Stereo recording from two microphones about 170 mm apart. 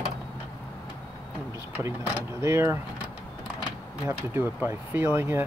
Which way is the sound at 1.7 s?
10° right (ahead or behind).